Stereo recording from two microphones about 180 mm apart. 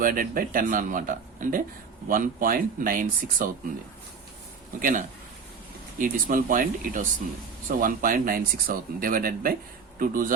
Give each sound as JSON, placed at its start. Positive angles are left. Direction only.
{"t": 0.0, "sound": "speech", "side_deg": -50}
{"t": 4.8, "sound": "speech", "side_deg": -45}